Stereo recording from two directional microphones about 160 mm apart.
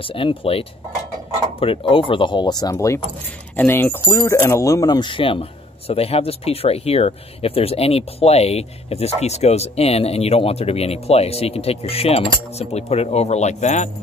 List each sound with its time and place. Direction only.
0.0 s speech: 35° left (ahead or behind)